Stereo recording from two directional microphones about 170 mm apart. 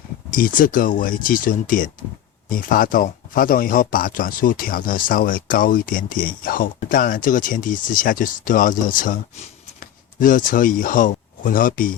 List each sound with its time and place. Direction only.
0.3 s speech: 55° left (ahead or behind)